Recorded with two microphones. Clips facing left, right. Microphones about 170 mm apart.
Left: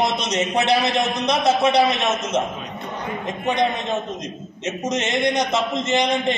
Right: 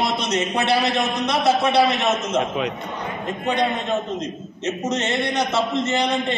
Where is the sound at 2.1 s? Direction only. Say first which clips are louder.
Right 1 dB; 75° right (ahead or behind).